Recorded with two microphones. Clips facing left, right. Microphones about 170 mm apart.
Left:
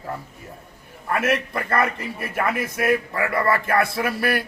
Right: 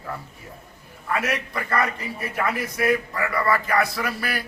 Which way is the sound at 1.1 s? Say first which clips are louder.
Left 3 dB; 55° left (ahead or behind).